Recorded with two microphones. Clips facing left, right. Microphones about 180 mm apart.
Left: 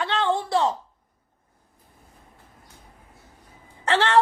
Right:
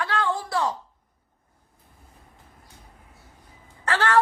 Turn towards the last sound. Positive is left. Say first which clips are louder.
# left 2 dB
turn(degrees=25)  # may be behind; listen again after turning